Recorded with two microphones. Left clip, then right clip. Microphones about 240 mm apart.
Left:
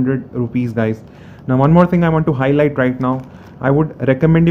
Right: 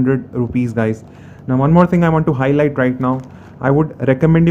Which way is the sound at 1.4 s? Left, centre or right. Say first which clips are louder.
Left 1 dB; centre.